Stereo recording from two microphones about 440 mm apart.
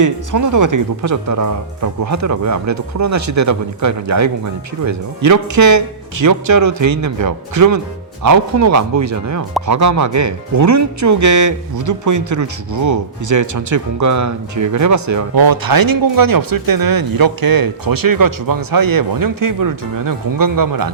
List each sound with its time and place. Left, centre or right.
0.0 s speech: right